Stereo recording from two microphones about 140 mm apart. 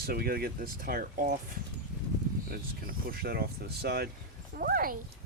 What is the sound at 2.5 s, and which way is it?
Speech, 90° right.